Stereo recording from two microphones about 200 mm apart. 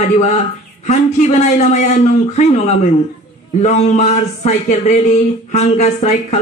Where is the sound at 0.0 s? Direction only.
35° left (ahead or behind).